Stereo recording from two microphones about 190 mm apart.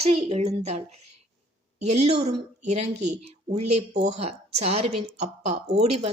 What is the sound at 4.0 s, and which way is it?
A woman's voice, 35° right (ahead or behind).